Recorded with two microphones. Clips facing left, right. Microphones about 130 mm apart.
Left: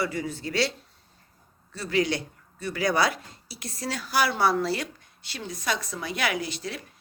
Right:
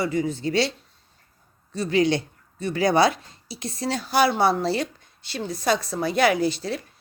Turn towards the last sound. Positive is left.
turn(degrees=-30)  # may be behind; listen again after turning